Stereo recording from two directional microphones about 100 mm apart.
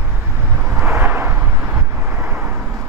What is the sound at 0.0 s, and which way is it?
Vehicle, 15° right (ahead or behind).